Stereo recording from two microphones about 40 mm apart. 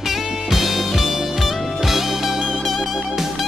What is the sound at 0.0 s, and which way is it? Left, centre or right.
Music, centre.